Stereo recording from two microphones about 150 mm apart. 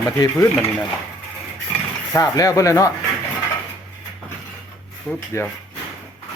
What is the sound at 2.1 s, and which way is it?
Speech, 25° left (ahead or behind).